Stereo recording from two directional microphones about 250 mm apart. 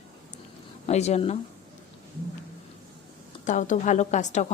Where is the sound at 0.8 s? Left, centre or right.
Left.